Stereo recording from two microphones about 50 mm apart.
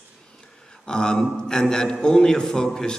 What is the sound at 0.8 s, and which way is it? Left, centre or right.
A man's voice, centre.